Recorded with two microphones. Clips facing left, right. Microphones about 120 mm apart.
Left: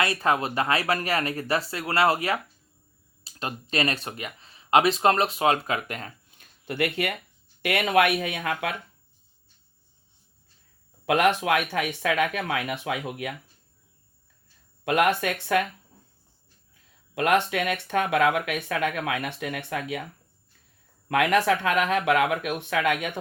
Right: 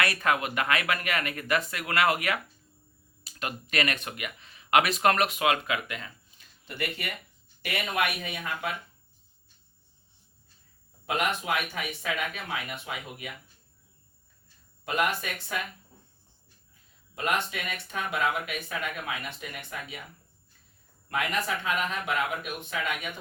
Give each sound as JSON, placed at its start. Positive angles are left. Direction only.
{"t": 0.0, "sound": "speech", "side_deg": 30}
{"t": 11.0, "sound": "speech", "side_deg": 75}
{"t": 14.8, "sound": "speech", "side_deg": 65}
{"t": 17.2, "sound": "speech", "side_deg": 70}
{"t": 21.1, "sound": "speech", "side_deg": 75}